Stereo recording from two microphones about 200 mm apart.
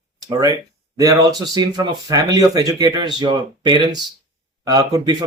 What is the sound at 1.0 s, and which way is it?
Speech, 20° right (ahead or behind).